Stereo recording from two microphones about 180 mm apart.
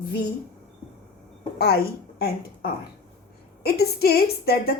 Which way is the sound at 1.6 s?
60° left (ahead or behind).